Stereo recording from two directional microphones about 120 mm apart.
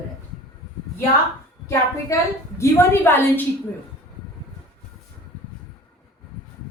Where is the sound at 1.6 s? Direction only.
25° left (ahead or behind).